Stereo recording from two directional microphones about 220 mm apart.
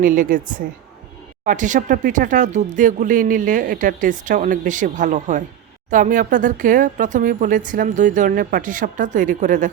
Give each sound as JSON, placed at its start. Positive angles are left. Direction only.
{"t": 0.0, "sound": "speech", "side_deg": -35}